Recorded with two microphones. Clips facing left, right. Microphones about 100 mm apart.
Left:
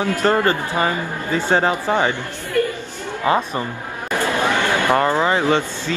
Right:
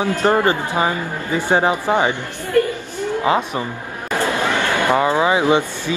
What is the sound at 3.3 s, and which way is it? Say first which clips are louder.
Speech: left 2 dB; 15° right (ahead or behind).